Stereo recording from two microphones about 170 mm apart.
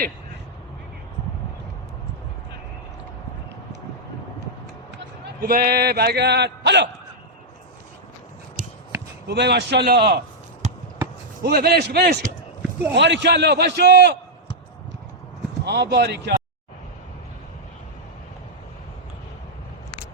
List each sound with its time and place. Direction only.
5.2 s a man's voice: 65° right (ahead or behind); by 6.8 s 90° right
9.2 s a man's voice: 80° right
11.4 s a man's voice: 70° right (ahead or behind)
12.9 s a man's voice: 90° right
15.6 s a man's voice: 80° right